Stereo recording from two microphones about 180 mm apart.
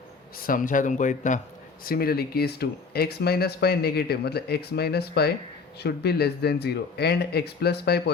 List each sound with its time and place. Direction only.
0.4 s speech: 50° left (ahead or behind)
1.8 s speech: 55° left (ahead or behind)